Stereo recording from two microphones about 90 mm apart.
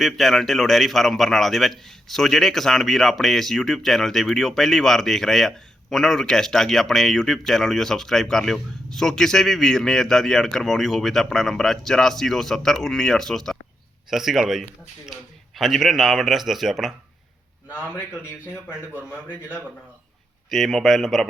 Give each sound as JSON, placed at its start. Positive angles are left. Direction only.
{"t": 0.0, "sound": "a man's voice", "side_deg": 0}
{"t": 18.9, "sound": "a man's voice", "side_deg": -20}
{"t": 20.5, "sound": "a man's voice", "side_deg": 0}